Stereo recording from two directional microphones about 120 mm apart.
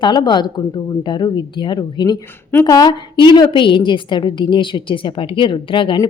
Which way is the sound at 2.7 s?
35° left (ahead or behind).